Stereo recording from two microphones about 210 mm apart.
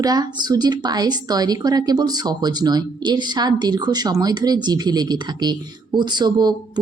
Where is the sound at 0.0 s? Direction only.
20° right (ahead or behind).